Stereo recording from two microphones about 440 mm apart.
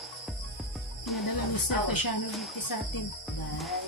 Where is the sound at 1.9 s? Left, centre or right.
Left.